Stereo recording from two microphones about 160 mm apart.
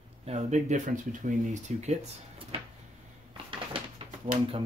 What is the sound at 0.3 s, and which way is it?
Speech, 45° right (ahead or behind).